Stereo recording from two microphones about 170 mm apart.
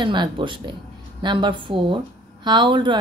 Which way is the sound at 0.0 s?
25° right (ahead or behind).